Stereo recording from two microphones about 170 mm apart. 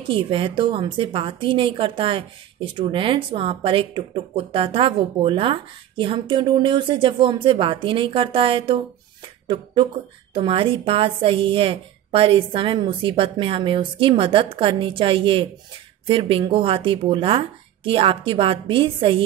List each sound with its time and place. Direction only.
0.1 s a woman's voice: 30° right (ahead or behind)
10.3 s a woman's voice: 30° right (ahead or behind)